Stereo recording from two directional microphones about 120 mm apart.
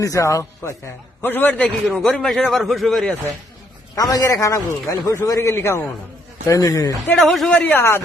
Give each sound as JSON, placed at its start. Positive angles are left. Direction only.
{"t": 0.0, "sound": "a man's voice", "side_deg": 25}
{"t": 3.9, "sound": "a man's voice", "side_deg": 30}
{"t": 7.2, "sound": "a man's voice", "side_deg": 0}
{"t": 7.5, "sound": "a man's voice", "side_deg": 15}